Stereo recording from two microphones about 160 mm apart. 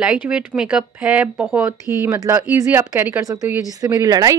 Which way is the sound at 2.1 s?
20° right (ahead or behind).